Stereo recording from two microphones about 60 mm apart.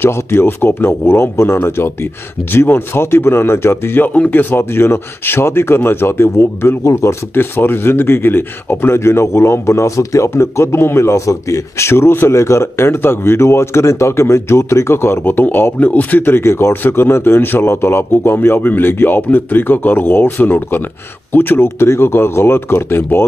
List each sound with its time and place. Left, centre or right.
0.0 s a man's voice: left